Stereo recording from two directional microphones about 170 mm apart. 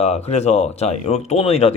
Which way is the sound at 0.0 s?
40° left (ahead or behind).